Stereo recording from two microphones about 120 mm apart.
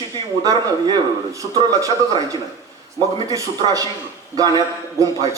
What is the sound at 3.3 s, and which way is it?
A man's voice, 30° right (ahead or behind).